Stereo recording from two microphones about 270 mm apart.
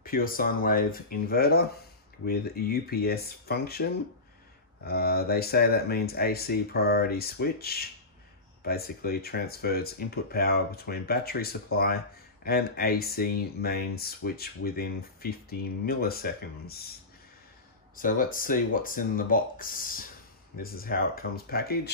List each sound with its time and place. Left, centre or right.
0.0 s speech: left
17.9 s speech: left